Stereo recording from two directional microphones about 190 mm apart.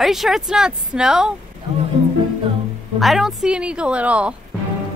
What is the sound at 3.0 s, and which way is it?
Speech, centre (ahead or behind).